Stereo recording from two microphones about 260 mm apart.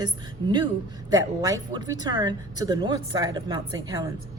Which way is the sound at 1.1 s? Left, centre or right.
Centre.